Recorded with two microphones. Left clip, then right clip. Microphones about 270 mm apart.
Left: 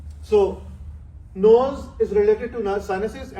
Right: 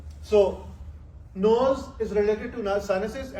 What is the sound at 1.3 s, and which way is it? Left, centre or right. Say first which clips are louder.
A man's voice: left 6 dB; centre.